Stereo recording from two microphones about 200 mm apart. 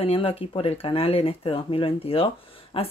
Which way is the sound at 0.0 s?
25° left (ahead or behind).